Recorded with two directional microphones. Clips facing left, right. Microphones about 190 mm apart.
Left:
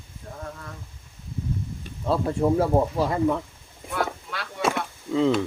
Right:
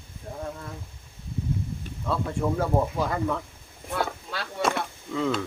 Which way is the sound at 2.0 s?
35° left (ahead or behind).